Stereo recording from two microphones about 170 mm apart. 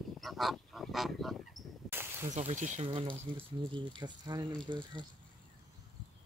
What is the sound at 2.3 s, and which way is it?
Speech, 45° right (ahead or behind).